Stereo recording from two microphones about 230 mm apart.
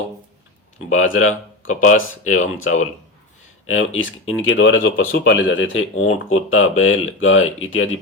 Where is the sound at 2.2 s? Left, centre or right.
Left.